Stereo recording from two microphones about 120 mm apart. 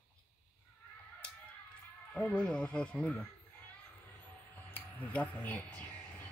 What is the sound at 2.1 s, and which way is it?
Speech, 10° left (ahead or behind).